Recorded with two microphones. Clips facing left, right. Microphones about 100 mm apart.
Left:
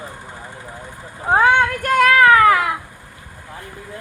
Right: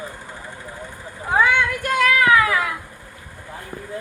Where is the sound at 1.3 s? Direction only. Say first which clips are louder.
Left 4 dB; 45° left (ahead or behind).